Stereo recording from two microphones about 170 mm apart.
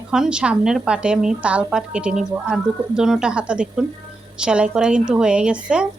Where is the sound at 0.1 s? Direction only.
5° right (ahead or behind).